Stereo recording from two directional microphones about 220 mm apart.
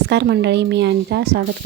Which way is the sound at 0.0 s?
50° right (ahead or behind).